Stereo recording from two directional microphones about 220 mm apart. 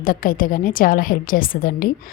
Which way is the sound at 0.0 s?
40° left (ahead or behind).